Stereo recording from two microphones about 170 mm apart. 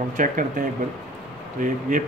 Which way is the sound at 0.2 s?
50° right (ahead or behind).